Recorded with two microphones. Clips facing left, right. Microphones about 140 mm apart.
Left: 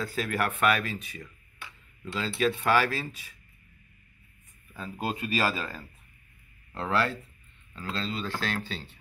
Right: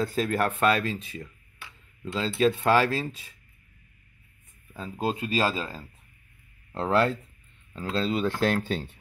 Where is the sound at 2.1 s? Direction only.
30° right (ahead or behind).